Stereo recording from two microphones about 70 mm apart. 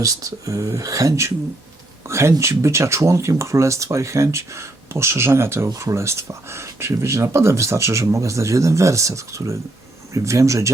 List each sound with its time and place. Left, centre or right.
0.0 s speech: right
5.6 s speech: right